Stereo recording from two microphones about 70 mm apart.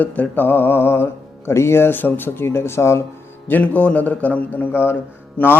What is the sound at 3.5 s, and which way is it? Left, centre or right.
A man's voice, left.